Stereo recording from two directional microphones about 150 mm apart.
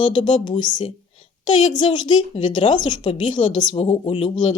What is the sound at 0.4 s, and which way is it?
Speech, 30° left (ahead or behind).